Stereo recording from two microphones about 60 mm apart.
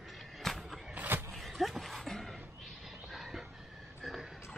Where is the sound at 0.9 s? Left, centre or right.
Right.